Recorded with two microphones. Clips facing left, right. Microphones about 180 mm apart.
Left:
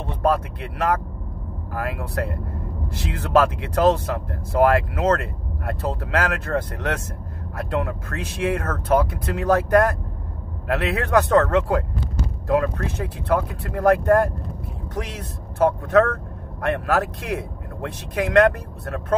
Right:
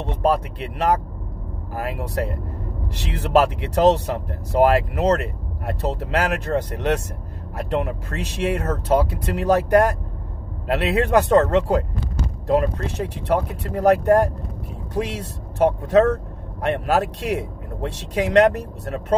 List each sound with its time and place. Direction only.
0.0 s speech: 20° right (ahead or behind)
15.6 s speech: 20° right (ahead or behind)